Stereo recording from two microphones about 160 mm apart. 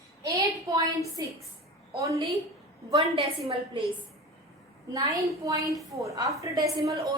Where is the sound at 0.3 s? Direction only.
20° right (ahead or behind).